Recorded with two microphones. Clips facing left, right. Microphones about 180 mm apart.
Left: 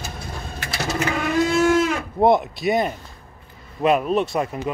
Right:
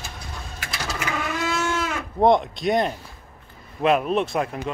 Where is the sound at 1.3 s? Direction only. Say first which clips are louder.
Left 10 dB; 35° left (ahead or behind).